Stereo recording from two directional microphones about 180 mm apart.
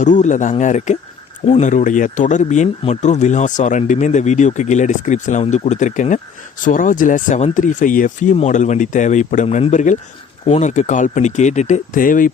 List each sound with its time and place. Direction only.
0.0 s speech: 45° left (ahead or behind)